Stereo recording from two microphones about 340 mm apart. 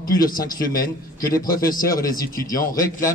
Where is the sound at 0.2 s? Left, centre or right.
Centre.